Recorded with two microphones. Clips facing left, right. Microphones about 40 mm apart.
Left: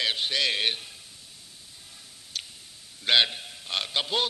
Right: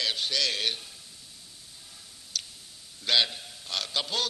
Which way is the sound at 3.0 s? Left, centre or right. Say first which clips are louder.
Left 3 dB; left.